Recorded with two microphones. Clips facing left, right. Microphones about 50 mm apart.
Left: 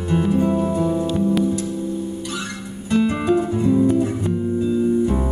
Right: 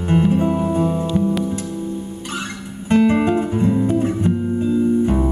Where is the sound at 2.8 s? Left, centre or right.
Right.